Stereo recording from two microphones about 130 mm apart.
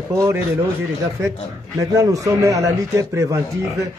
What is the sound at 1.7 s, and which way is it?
A man's voice, 25° right (ahead or behind).